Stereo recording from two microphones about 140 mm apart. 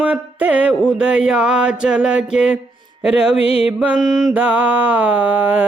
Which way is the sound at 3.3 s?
45° left (ahead or behind).